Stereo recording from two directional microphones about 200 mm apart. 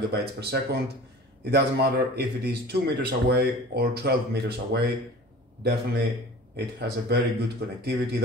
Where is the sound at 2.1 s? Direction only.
55° right (ahead or behind).